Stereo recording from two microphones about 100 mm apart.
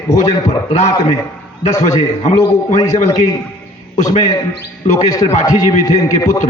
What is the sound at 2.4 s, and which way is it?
Speech, 35° left (ahead or behind).